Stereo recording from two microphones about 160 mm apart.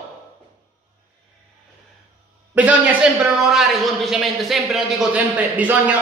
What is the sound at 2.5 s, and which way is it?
A man's voice, 10° right (ahead or behind).